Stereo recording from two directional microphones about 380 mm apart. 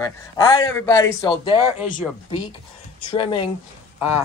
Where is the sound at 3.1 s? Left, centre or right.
Centre.